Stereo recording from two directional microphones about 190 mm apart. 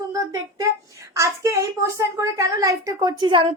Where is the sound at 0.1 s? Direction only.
20° right (ahead or behind).